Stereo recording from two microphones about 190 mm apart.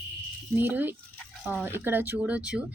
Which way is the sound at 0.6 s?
10° right (ahead or behind).